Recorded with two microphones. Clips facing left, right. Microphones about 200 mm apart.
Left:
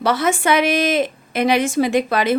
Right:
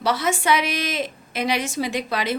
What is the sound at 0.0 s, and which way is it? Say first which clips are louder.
A woman's voice: left 4 dB; 55° left (ahead or behind).